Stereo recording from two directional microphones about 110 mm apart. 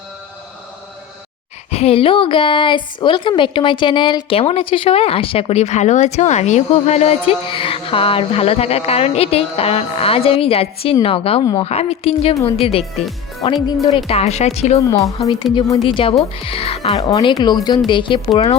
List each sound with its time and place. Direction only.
1.7 s a woman's voice: 65° left (ahead or behind)
13.4 s speech: 45° left (ahead or behind)
13.9 s speech: 70° left (ahead or behind)
14.8 s speech: 30° left (ahead or behind)
15.9 s a woman's voice: 50° left (ahead or behind)
17.0 s speech: 30° left (ahead or behind); by 18.4 s 50° left (ahead or behind)